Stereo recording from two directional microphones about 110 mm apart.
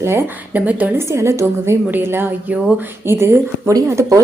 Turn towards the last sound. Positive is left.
turn(degrees=-30)  # may be behind; listen again after turning